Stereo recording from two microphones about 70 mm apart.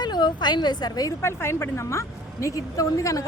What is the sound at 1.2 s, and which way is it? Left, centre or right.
Speech, left.